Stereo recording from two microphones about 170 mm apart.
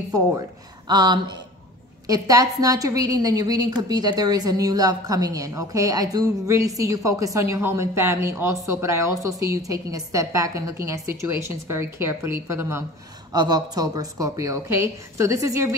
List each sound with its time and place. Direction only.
0.8 s a woman's voice: 25° right (ahead or behind)